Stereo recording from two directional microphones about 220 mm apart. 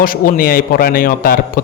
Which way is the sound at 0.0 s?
40° left (ahead or behind).